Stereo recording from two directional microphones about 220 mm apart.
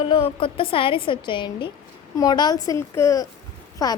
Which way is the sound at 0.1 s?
25° left (ahead or behind).